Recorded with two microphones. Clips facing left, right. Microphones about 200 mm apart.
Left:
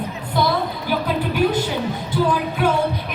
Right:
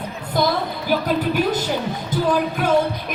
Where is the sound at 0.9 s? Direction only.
40° right (ahead or behind).